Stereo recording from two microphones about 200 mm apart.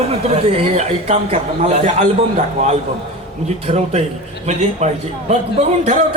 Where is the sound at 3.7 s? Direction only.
30° right (ahead or behind).